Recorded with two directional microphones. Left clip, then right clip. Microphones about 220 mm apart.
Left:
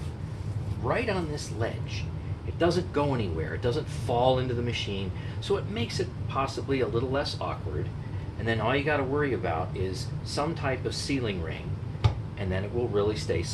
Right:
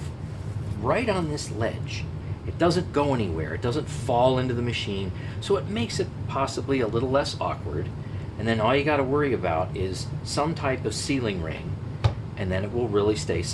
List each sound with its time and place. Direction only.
0.9 s speech: 40° right (ahead or behind)